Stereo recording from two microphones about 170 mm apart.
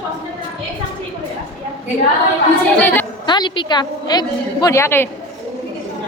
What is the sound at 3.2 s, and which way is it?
A woman's voice, 25° left (ahead or behind).